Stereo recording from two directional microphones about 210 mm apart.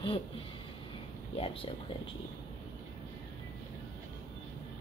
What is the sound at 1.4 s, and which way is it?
Speech, 25° left (ahead or behind).